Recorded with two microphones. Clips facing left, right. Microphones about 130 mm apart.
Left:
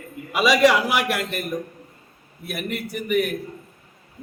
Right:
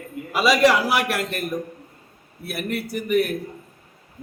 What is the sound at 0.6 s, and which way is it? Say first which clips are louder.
Speech: even; centre (ahead or behind).